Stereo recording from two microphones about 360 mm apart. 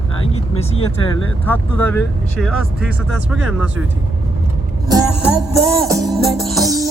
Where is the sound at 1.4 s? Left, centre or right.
Centre.